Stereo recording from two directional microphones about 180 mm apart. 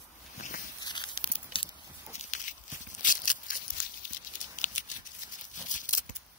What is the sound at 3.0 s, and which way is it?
Scissors, 45° left (ahead or behind).